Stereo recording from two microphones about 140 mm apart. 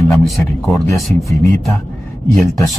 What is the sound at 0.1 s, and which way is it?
Speech, centre (ahead or behind).